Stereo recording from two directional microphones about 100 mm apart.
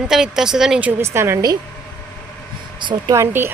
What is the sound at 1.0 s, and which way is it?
Speech, 25° right (ahead or behind).